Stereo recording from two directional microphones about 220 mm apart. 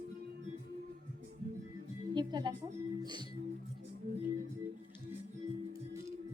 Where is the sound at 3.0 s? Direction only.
20° right (ahead or behind).